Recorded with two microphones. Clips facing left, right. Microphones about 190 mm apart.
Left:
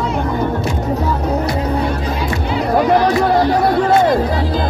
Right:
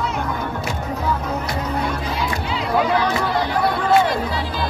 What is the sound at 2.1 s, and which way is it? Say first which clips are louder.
Music: left 4 dB; 50° left (ahead or behind).